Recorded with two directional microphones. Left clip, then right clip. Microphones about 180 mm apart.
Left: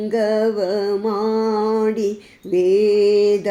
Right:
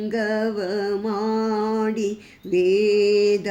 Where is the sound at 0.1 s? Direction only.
10° right (ahead or behind).